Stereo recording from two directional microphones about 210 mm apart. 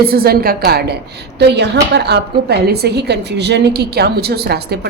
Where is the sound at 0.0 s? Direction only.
45° right (ahead or behind).